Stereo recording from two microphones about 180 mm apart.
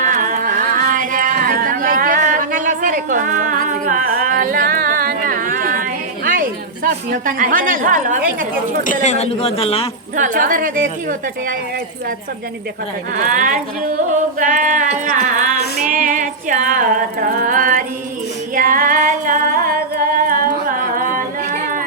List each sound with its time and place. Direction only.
0.0 s music: 45° right (ahead or behind)
8.8 s speech: 45° left (ahead or behind)
10.2 s a sound: 45° right (ahead or behind)
13.1 s a sound: 45° right (ahead or behind)
15.9 s music: 50° right (ahead or behind)
18.5 s singing: 50° right (ahead or behind)